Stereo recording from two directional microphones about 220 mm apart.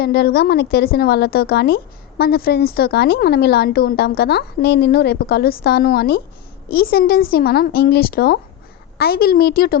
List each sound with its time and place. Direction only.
0.0 s a woman's voice: 45° left (ahead or behind)